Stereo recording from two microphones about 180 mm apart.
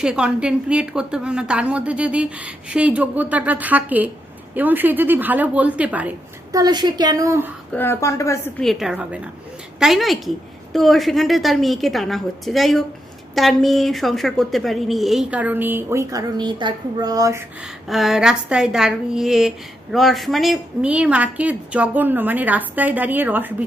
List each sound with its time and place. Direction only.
0.0 s a woman's voice: 5° right (ahead or behind)
6.5 s a woman's voice: 20° right (ahead or behind)
7.7 s a woman's voice: 10° left (ahead or behind)
8.6 s a woman's voice: centre (ahead or behind); by 17.4 s 20° right (ahead or behind)
17.8 s a woman's voice: centre (ahead or behind)